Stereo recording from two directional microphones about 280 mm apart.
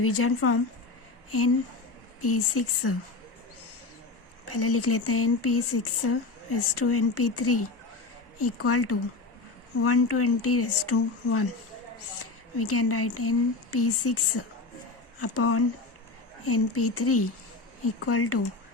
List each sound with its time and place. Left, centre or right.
0.0 s speech: left
2.2 s speech: left
4.4 s speech: left